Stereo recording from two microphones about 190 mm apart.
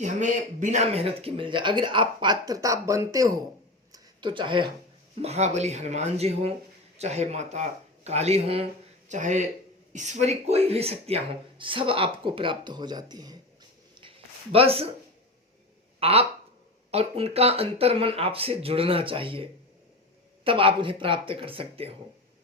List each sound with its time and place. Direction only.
0.0 s speech: 40° right (ahead or behind); by 3.3 s 20° right (ahead or behind)
3.9 s a sound: 25° right (ahead or behind)
5.2 s speech: 35° right (ahead or behind)
14.5 s speech: 30° right (ahead or behind)
16.0 s speech: 30° right (ahead or behind)